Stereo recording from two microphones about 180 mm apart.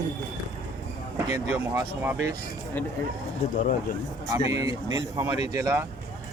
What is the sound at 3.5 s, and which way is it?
Speech, 45° left (ahead or behind).